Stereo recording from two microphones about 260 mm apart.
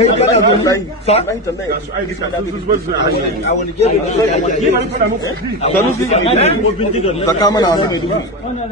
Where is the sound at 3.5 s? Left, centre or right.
Left.